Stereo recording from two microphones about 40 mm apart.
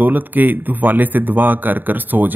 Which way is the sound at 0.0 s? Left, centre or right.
Right.